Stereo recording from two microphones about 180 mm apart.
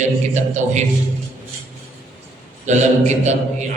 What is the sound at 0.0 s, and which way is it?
Speech, 40° right (ahead or behind).